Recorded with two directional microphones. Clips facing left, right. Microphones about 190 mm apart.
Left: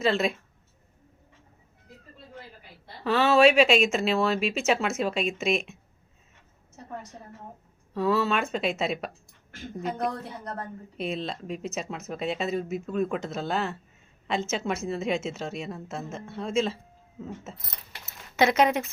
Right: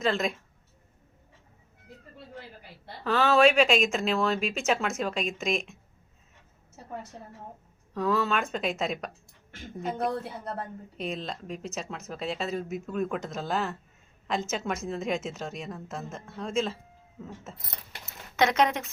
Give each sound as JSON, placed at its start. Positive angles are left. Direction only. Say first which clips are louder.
{"t": 0.0, "sound": "speech", "louder": "left 3 dB", "side_deg": 5}
{"t": 3.0, "sound": "speech", "louder": "left 2 dB", "side_deg": 5}
{"t": 7.9, "sound": "speech", "louder": "left 2 dB", "side_deg": 5}
{"t": 18.3, "sound": "speech", "louder": "left 2 dB", "side_deg": 5}